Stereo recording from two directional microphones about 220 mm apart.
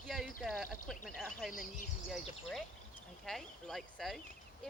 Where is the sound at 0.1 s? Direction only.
Centre (ahead or behind).